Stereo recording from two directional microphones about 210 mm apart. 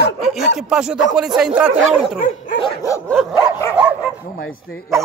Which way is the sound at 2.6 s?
15° left (ahead or behind).